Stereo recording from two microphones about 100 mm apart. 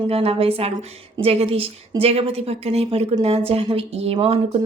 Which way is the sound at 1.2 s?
80° right.